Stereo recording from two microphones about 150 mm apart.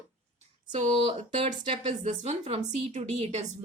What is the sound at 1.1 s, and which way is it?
A woman's voice, 50° right (ahead or behind).